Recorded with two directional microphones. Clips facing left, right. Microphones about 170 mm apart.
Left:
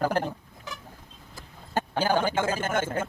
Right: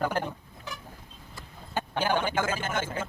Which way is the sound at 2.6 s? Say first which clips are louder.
Left 4 dB; 50° left (ahead or behind).